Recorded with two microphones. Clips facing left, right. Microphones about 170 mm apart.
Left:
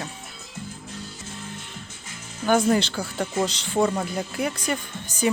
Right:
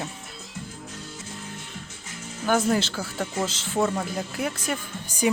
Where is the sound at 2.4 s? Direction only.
Centre (ahead or behind).